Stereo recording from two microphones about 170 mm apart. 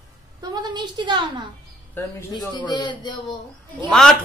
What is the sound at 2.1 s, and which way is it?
A man's voice, 25° left (ahead or behind).